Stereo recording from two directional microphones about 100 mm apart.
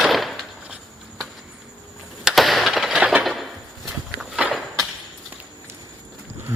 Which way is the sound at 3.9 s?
10° right (ahead or behind).